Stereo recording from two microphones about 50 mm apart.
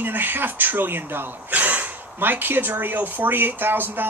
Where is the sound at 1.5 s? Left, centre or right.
Right.